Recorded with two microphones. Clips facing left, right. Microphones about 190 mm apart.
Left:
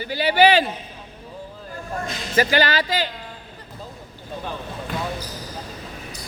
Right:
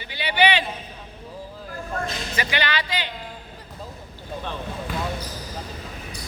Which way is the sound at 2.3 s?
40° left (ahead or behind).